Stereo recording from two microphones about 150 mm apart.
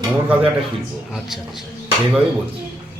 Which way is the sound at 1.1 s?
Centre (ahead or behind).